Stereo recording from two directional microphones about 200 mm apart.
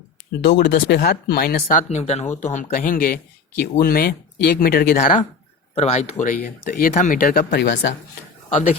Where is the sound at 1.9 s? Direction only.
35° left (ahead or behind); by 4.9 s 50° left (ahead or behind).